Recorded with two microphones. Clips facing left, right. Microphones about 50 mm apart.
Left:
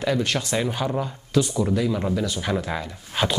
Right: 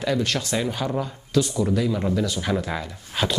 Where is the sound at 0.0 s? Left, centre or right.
Centre.